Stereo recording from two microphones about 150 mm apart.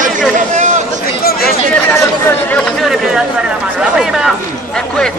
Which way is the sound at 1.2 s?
90° left.